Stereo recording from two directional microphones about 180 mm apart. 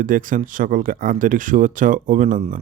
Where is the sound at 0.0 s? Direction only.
50° right (ahead or behind).